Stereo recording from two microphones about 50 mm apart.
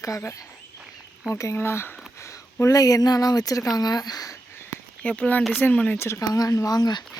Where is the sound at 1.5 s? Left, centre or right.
Left.